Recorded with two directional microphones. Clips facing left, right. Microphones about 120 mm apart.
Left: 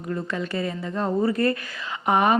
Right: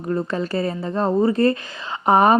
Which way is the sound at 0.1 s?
35° right (ahead or behind).